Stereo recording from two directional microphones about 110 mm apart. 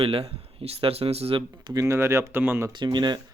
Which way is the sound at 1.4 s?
35° right (ahead or behind).